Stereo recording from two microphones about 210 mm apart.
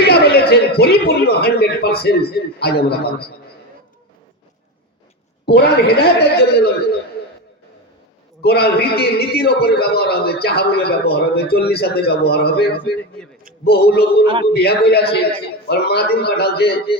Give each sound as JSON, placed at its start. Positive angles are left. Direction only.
{"t": 0.0, "sound": "a man's voice", "side_deg": 50}
{"t": 5.5, "sound": "a man's voice", "side_deg": 50}
{"t": 8.4, "sound": "a man's voice", "side_deg": 50}
{"t": 13.7, "sound": "a man's voice", "side_deg": 50}